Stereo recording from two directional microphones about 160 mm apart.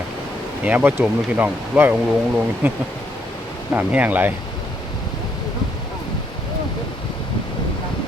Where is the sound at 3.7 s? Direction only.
10° right (ahead or behind).